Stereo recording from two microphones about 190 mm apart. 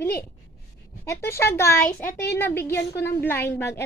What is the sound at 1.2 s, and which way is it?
A woman's voice, 15° left (ahead or behind).